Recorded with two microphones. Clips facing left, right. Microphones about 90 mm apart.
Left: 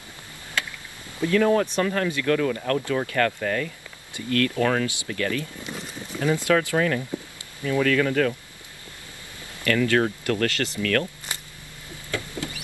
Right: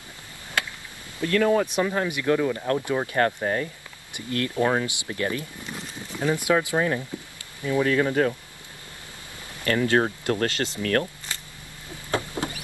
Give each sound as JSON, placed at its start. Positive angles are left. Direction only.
{"t": 1.3, "sound": "speech", "side_deg": 0}
{"t": 9.7, "sound": "speech", "side_deg": -30}
{"t": 12.1, "sound": "rodents", "side_deg": -25}